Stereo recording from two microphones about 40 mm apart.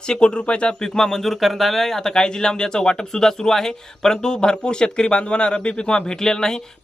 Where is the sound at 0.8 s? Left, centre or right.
Centre.